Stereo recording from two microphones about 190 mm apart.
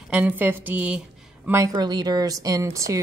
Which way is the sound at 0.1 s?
10° right (ahead or behind).